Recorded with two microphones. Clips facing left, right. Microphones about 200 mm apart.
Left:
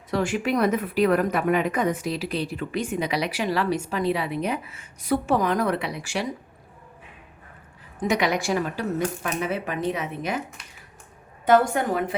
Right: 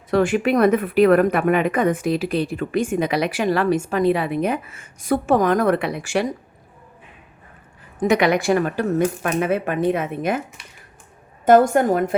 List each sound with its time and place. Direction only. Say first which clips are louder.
0.1 s speech: right 6 dB; 60° right (ahead or behind)
8.0 s speech: right 6 dB; 60° right (ahead or behind)
11.4 s speech: right 6 dB; 45° right (ahead or behind)